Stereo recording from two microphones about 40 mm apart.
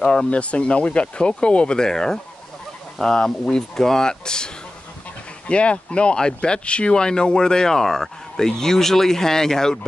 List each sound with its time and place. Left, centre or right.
0.0 s speech: centre
0.3 s speech: left
5.5 s speech: left